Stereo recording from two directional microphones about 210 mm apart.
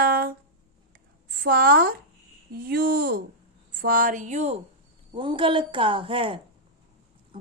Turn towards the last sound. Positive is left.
turn(degrees=-25)  # may be behind; listen again after turning